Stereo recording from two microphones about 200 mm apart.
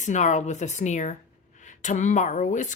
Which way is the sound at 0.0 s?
35° left (ahead or behind).